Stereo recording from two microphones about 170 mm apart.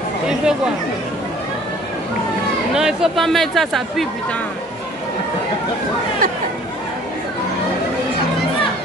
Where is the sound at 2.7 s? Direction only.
5° right (ahead or behind).